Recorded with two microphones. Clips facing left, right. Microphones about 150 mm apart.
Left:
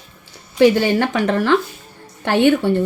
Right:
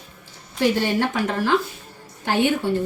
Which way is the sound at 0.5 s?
90° left.